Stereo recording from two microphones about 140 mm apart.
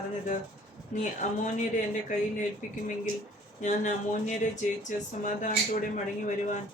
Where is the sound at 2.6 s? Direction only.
65° left (ahead or behind).